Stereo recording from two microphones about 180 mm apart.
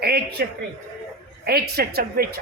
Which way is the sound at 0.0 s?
65° right (ahead or behind).